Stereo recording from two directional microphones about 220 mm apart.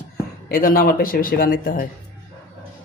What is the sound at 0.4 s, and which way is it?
Speech, 40° left (ahead or behind).